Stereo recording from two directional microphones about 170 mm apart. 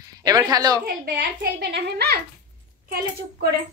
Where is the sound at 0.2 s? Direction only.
20° right (ahead or behind).